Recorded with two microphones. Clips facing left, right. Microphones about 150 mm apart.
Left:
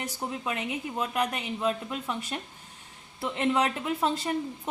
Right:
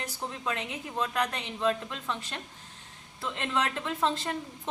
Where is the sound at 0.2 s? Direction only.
15° left (ahead or behind).